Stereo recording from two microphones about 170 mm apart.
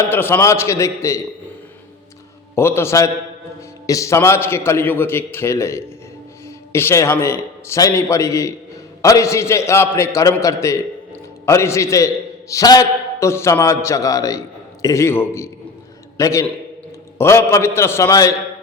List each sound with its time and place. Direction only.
0.1 s a man's voice: 15° left (ahead or behind)
2.6 s a man's voice: 15° left (ahead or behind)